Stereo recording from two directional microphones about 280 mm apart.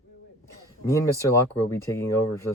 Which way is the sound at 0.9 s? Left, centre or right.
Centre.